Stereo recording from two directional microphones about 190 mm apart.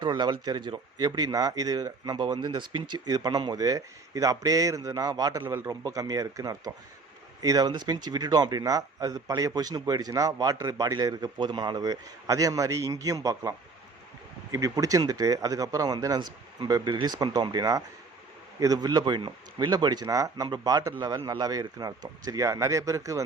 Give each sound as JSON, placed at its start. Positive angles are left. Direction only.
{"t": 0.0, "sound": "speech", "side_deg": -20}